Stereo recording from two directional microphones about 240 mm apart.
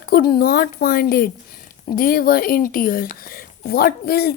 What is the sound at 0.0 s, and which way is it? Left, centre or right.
Speech, left.